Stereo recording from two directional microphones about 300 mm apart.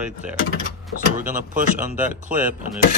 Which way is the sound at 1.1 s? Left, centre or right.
Right.